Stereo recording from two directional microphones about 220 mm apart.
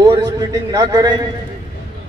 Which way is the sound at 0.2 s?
15° right (ahead or behind).